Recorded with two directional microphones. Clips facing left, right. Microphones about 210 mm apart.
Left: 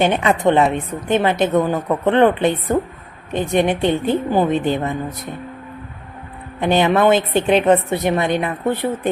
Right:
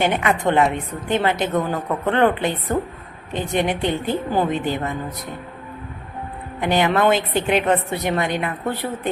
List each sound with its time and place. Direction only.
0.0 s a woman's voice: 25° left (ahead or behind)
6.6 s a woman's voice: 20° left (ahead or behind)